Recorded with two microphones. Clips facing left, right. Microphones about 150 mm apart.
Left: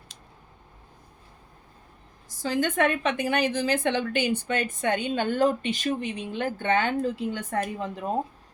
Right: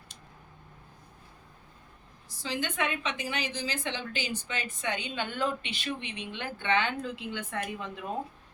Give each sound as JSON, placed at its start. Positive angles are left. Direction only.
{"t": 2.4, "sound": "a woman's voice", "side_deg": 50}